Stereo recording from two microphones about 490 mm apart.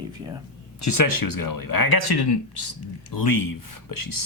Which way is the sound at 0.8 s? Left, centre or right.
Left.